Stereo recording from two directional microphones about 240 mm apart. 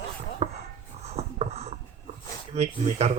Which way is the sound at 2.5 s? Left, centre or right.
Right.